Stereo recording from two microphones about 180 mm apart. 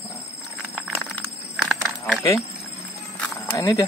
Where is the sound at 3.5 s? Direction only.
20° left (ahead or behind).